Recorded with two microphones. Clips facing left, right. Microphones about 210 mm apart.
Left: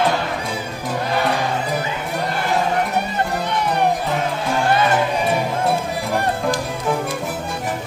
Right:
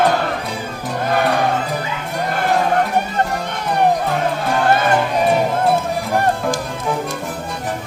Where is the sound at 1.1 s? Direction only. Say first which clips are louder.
Right 4 dB; 55° right (ahead or behind).